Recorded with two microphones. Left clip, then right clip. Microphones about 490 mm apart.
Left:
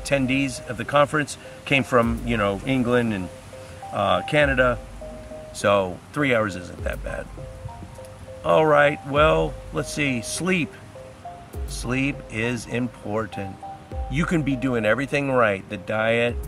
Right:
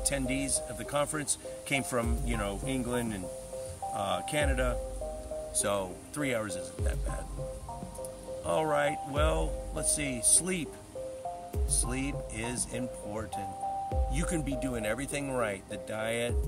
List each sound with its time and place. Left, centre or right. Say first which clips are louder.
0.0 s speech: left 10 dB; right
8.5 s speech: left 12 dB; right
11.7 s speech: left 10 dB; right